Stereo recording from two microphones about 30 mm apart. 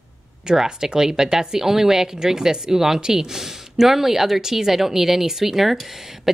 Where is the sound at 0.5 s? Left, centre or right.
Right.